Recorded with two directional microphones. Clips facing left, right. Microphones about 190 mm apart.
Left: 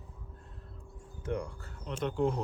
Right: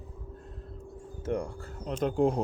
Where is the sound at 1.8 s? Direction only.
40° right (ahead or behind).